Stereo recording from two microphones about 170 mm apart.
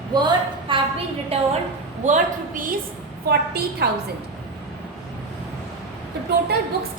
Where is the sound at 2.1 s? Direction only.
50° right (ahead or behind).